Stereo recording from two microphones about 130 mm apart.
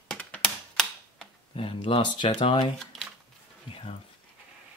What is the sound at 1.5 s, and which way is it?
Speech, 40° left (ahead or behind).